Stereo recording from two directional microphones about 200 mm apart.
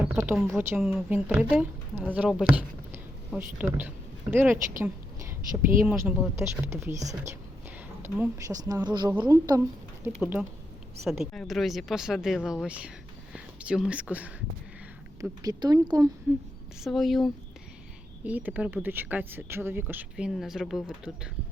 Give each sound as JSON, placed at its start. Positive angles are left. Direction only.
{"t": 0.0, "sound": "a sound", "side_deg": -10}
{"t": 0.8, "sound": "speech", "side_deg": 0}
{"t": 5.8, "sound": "speech", "side_deg": -5}
{"t": 15.2, "sound": "speech", "side_deg": -20}
{"t": 16.8, "sound": "speech", "side_deg": 0}